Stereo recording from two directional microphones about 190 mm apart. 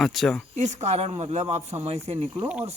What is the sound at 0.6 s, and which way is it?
Speech, 35° right (ahead or behind).